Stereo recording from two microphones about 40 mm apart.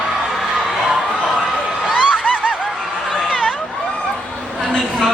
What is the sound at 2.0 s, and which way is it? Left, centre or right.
Snicker, right.